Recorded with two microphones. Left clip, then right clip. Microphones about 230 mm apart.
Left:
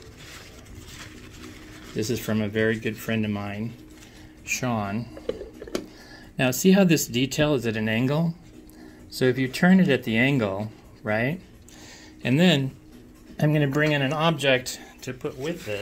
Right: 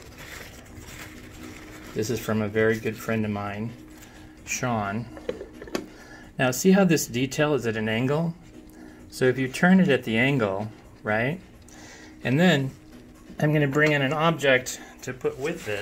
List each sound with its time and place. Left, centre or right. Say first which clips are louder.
2.0 s speech: even; left
3.0 s speech: right 1 dB; left
4.6 s speech: right 3 dB; left
6.3 s speech: even; left
12.2 s speech: even; left
13.4 s speech: right 1 dB; left
14.2 s speech: right 1 dB; left